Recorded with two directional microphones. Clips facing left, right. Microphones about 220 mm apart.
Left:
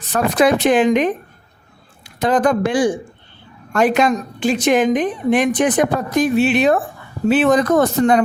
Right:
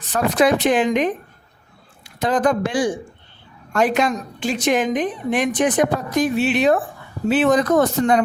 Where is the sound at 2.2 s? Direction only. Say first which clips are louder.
Left 3 dB; 60° left (ahead or behind).